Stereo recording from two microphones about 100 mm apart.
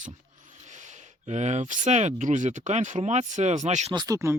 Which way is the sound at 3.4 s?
90° right.